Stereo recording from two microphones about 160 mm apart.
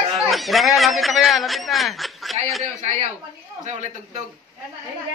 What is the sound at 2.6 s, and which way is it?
A man's voice, 45° right (ahead or behind).